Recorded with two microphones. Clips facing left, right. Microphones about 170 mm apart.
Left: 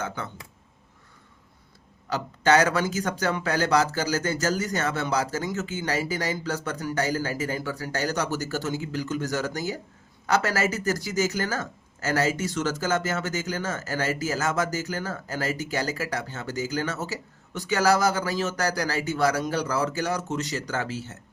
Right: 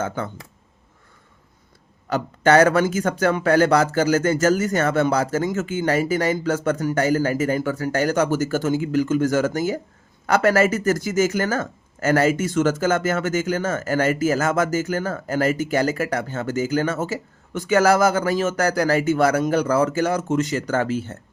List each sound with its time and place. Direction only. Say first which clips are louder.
2.0 s speech: right 4 dB; 55° right (ahead or behind)